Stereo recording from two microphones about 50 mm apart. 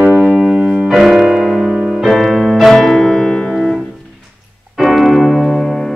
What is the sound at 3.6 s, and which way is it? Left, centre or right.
Music, centre.